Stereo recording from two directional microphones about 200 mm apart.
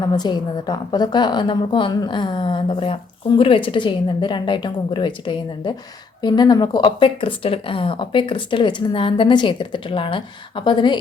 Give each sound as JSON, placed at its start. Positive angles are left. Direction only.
{"t": 0.0, "sound": "a woman's voice", "side_deg": 20}